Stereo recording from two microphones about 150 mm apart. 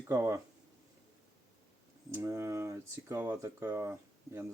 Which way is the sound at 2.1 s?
15° right (ahead or behind).